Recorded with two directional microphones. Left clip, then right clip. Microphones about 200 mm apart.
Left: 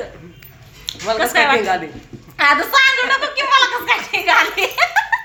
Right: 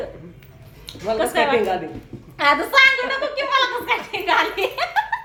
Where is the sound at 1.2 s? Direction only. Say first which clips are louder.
Left 4 dB; 15° left (ahead or behind).